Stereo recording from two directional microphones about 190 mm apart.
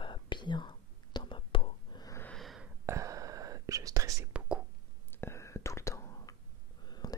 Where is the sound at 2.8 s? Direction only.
15° right (ahead or behind).